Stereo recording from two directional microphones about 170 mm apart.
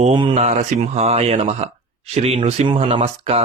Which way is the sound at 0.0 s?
30° right (ahead or behind).